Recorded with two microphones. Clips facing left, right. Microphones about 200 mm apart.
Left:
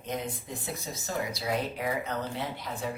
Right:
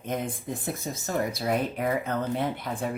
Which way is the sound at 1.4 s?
55° right (ahead or behind).